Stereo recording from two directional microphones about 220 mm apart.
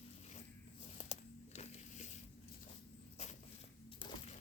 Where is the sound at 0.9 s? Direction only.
30° left (ahead or behind).